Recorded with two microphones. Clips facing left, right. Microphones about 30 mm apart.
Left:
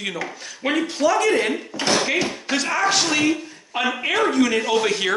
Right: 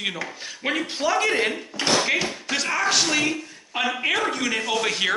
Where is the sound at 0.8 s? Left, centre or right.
Centre.